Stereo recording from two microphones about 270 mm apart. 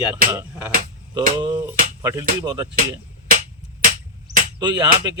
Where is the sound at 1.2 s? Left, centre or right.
Right.